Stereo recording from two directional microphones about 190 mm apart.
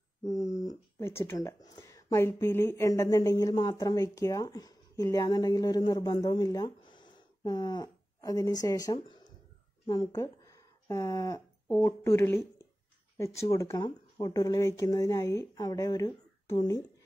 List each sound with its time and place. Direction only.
0.2 s a sound: 15° left (ahead or behind)
0.6 s speech: 15° left (ahead or behind)
13.5 s speech: 15° left (ahead or behind)